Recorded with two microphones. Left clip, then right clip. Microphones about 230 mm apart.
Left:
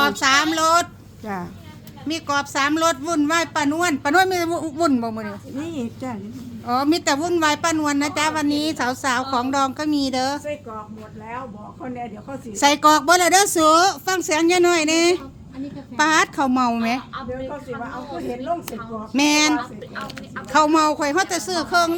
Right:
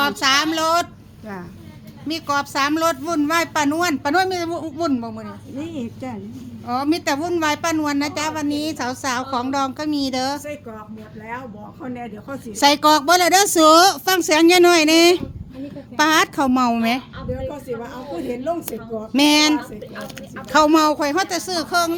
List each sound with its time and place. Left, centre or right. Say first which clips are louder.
0.0 s a woman's voice: even; centre
2.0 s a woman's voice: right 1 dB; centre
5.5 s a woman's voice: right 1 dB; left
6.7 s a woman's voice: left 1 dB; centre
11.8 s speech: left 1 dB; right
12.5 s a woman's voice: right 1 dB; centre
19.1 s a woman's voice: right 2 dB; centre